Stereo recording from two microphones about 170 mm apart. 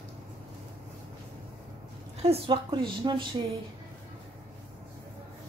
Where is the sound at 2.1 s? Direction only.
35° right (ahead or behind).